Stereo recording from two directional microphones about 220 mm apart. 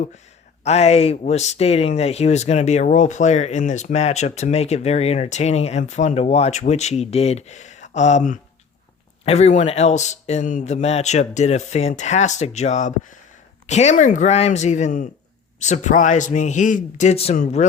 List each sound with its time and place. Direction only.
0.6 s speech: 30° left (ahead or behind)